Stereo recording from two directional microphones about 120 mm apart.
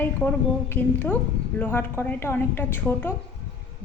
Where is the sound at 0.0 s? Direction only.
15° left (ahead or behind).